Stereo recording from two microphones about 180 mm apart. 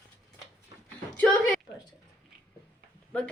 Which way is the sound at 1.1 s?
10° left (ahead or behind).